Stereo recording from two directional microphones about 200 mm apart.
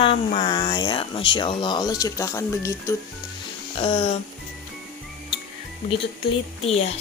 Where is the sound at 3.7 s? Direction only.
30° left (ahead or behind).